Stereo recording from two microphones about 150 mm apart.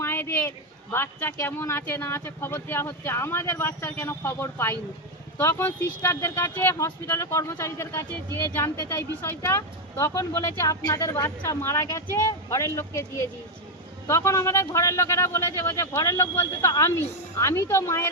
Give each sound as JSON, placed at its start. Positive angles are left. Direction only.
{"t": 0.0, "sound": "speech", "side_deg": 15}